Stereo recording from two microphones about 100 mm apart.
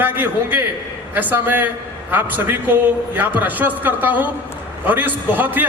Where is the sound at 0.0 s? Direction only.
20° right (ahead or behind).